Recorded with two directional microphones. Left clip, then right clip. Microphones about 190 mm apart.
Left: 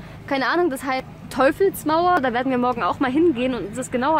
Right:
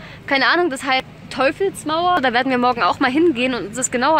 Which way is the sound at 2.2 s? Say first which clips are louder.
Right 4 dB; 10° right (ahead or behind).